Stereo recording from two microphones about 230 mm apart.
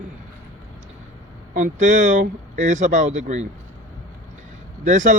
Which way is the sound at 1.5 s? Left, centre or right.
Right.